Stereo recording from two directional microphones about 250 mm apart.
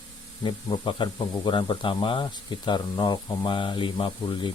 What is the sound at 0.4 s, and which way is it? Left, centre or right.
Speech, centre.